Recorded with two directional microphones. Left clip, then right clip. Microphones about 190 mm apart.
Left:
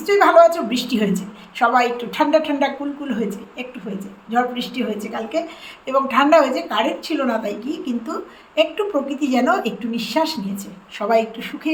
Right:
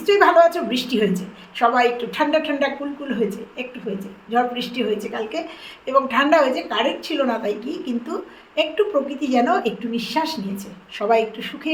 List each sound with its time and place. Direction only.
0.0 s a woman's voice: 5° left (ahead or behind)